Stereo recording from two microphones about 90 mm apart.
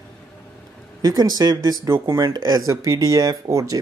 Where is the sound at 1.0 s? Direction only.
45° right (ahead or behind).